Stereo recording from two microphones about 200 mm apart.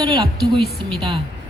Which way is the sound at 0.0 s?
20° right (ahead or behind).